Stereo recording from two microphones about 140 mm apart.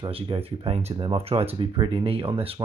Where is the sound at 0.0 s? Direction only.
40° right (ahead or behind).